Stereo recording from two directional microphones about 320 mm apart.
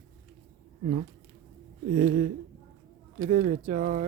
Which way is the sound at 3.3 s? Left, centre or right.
Right.